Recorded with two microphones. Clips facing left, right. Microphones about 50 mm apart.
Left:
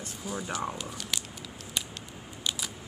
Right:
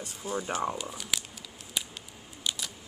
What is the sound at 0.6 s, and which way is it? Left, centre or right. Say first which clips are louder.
Speech: right 2 dB; centre.